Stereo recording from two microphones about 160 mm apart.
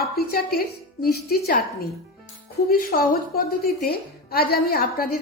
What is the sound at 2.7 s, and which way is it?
A woman's voice, 65° left (ahead or behind).